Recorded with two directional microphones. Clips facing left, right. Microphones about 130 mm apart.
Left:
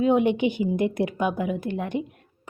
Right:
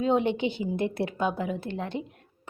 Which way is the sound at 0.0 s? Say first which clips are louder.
Left 4 dB; 15° left (ahead or behind).